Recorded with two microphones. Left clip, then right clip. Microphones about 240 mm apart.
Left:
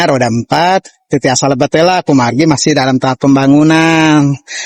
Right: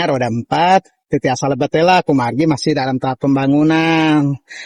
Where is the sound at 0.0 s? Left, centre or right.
Left.